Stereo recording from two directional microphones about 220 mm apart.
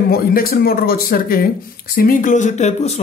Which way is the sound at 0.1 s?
40° left (ahead or behind).